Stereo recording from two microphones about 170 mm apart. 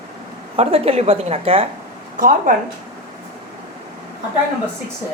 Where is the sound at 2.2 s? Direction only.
50° right (ahead or behind).